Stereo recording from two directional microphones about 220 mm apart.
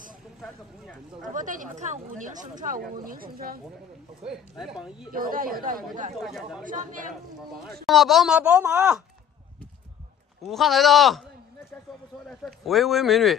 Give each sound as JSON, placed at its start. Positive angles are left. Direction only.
{"t": 0.4, "sound": "a woman's voice", "side_deg": 5}
{"t": 1.2, "sound": "speech", "side_deg": -35}
{"t": 4.3, "sound": "a woman's voice", "side_deg": -5}
{"t": 5.1, "sound": "speech", "side_deg": -40}
{"t": 6.2, "sound": "a woman's voice", "side_deg": 0}
{"t": 6.6, "sound": "speech", "side_deg": -35}
{"t": 7.8, "sound": "a woman's voice", "side_deg": 0}
{"t": 10.4, "sound": "a woman's voice", "side_deg": 0}